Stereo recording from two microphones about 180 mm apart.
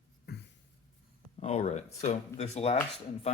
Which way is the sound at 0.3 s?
60° left (ahead or behind).